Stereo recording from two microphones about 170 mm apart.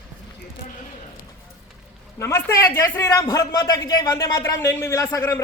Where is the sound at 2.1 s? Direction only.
20° left (ahead or behind).